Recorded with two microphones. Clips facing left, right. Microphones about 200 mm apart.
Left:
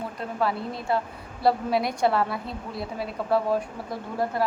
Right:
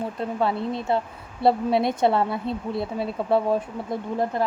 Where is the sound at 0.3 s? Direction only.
25° right (ahead or behind).